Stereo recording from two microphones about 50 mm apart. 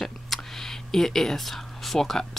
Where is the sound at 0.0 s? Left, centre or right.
Centre.